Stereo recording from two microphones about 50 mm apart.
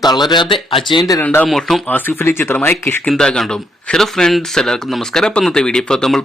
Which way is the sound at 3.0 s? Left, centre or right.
Centre.